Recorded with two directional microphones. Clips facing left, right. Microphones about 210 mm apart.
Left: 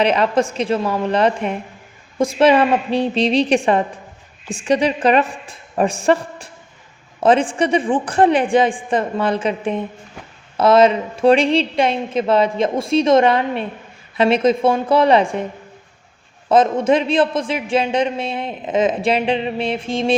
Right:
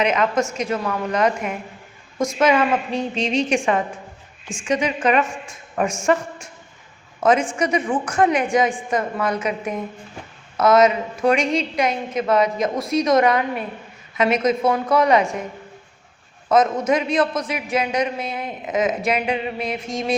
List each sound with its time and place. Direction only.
0.0 s a woman's voice: 35° left (ahead or behind)
16.5 s a man's voice: 30° left (ahead or behind)